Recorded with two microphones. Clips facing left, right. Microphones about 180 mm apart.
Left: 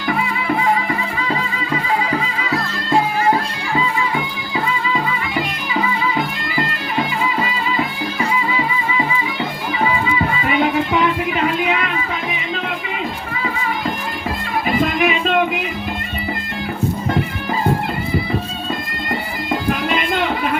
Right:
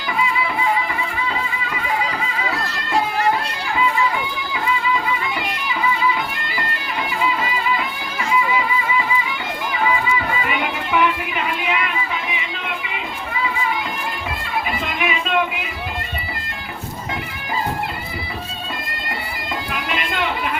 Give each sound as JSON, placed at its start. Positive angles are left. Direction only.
{"t": 14.8, "sound": "music", "side_deg": 45}